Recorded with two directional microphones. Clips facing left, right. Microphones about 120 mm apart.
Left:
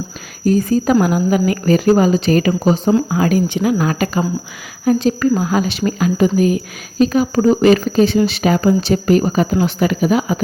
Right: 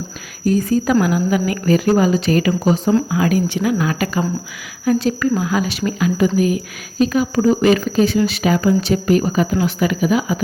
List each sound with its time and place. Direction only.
0.4 s speech: 30° left (ahead or behind)
3.8 s speech: 40° left (ahead or behind)
4.9 s speech: 25° left (ahead or behind)
5.4 s speech: 35° left (ahead or behind)
9.8 s speech: 40° left (ahead or behind)